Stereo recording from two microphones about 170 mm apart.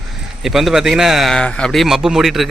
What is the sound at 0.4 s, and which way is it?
A man's voice, centre (ahead or behind).